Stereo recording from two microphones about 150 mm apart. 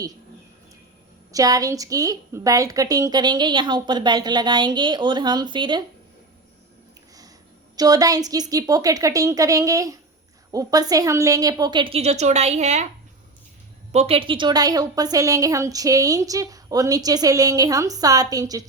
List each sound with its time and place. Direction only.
1.3 s a woman's voice: 25° right (ahead or behind)
7.8 s a woman's voice: 25° right (ahead or behind); by 12.9 s 50° right (ahead or behind)
13.9 s a woman's voice: 45° right (ahead or behind); by 18.7 s 25° right (ahead or behind)